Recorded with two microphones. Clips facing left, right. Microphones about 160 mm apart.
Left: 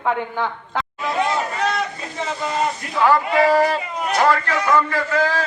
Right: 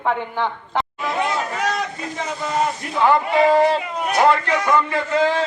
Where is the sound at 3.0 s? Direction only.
20° right (ahead or behind).